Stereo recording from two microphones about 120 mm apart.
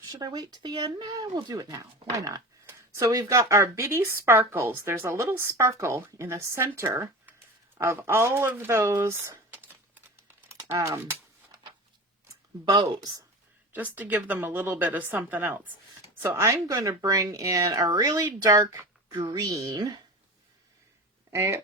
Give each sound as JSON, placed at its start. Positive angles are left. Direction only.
{"t": 0.1, "sound": "speech", "side_deg": -35}
{"t": 7.8, "sound": "a sound", "side_deg": -20}
{"t": 12.6, "sound": "speech", "side_deg": -35}
{"t": 13.7, "sound": "a woman's voice", "side_deg": -15}
{"t": 21.2, "sound": "speech", "side_deg": -25}